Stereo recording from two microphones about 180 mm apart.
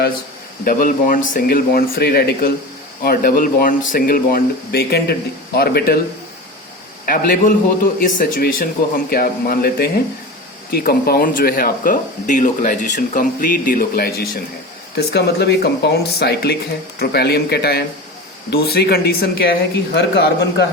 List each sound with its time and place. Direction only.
0.6 s speech: 55° left (ahead or behind)
7.0 s speech: 50° left (ahead or behind)
14.9 s speech: 70° left (ahead or behind)